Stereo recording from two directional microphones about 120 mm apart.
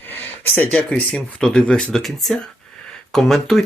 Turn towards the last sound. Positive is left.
turn(degrees=5)  # may be behind; listen again after turning